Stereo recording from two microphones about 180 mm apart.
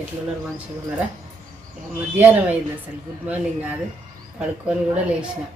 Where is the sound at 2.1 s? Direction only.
10° right (ahead or behind).